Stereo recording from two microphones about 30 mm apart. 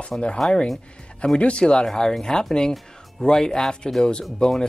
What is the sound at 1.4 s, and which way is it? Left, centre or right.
Speech, left.